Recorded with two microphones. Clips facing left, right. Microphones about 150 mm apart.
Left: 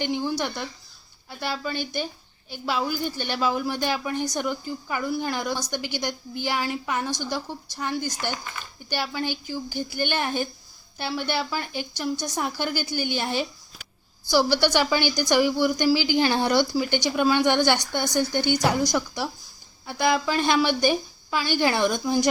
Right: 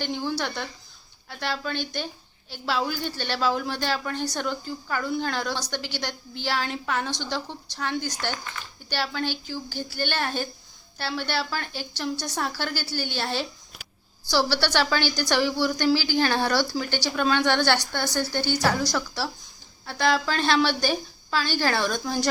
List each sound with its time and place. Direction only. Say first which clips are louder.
0.0 s a woman's voice: left 2 dB; 15° left (ahead or behind)